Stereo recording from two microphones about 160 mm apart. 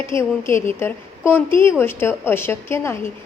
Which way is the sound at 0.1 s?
15° left (ahead or behind).